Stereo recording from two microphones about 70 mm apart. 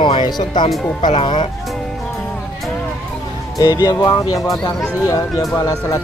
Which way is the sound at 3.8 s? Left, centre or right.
Left.